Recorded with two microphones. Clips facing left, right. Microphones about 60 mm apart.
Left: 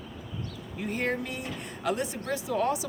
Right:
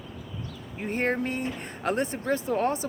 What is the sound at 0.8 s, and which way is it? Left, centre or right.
A woman's voice, right.